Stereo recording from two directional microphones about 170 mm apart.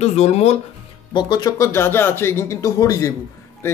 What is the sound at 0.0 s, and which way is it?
Speech, 40° left (ahead or behind).